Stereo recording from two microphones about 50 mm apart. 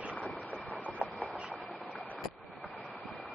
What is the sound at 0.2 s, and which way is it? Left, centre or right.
Train, left.